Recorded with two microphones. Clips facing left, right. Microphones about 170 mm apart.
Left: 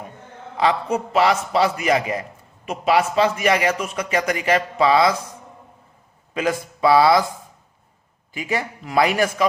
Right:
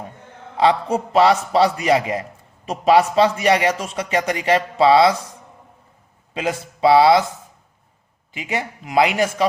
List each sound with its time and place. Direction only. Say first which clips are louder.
0.5 s a man's voice: right 3 dB; 30° right (ahead or behind)
6.3 s a man's voice: left 1 dB; 25° right (ahead or behind)
8.3 s a man's voice: left 1 dB; 20° right (ahead or behind)